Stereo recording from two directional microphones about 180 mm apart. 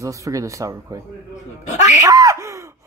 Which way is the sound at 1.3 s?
40° left (ahead or behind).